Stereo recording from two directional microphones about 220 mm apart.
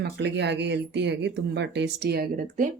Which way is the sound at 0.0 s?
50° right (ahead or behind).